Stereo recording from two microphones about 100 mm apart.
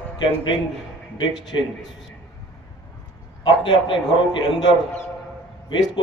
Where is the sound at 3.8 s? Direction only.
55° left (ahead or behind).